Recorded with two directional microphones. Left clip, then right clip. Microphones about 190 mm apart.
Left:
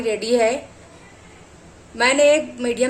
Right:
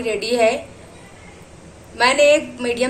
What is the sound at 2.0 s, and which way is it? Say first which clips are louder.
Speech: right 1 dB; 40° left (ahead or behind).